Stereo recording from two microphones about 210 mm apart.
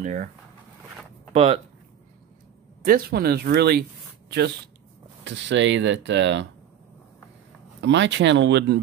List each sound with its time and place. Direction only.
0.0 s speech: 35° right (ahead or behind)
1.3 s speech: 30° right (ahead or behind)
2.8 s speech: 45° right (ahead or behind)
5.2 s speech: 60° right (ahead or behind)
7.8 s speech: 60° right (ahead or behind)